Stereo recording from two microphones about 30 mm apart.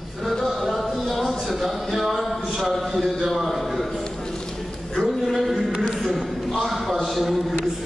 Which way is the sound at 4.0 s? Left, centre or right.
Left.